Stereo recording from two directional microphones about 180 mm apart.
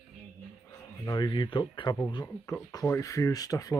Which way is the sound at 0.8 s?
20° left (ahead or behind).